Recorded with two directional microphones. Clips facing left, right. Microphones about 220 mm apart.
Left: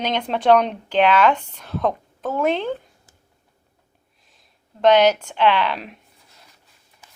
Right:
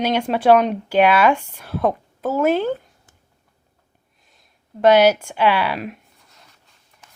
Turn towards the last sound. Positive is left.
turn(degrees=-5)  # may be behind; listen again after turning